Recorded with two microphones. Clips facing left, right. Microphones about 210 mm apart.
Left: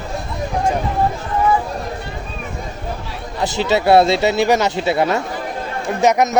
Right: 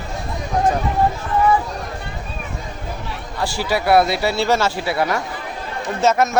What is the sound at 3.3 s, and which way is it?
Speech, 20° left (ahead or behind).